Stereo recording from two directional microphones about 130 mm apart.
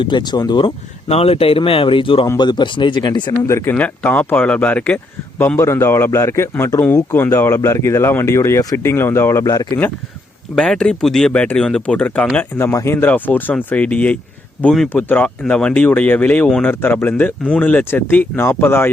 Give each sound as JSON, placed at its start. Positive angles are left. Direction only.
{"t": 0.0, "sound": "speech", "side_deg": 35}
{"t": 1.0, "sound": "speech", "side_deg": 50}
{"t": 3.4, "sound": "speech", "side_deg": 20}
{"t": 10.5, "sound": "speech", "side_deg": 5}
{"t": 16.8, "sound": "speech", "side_deg": 15}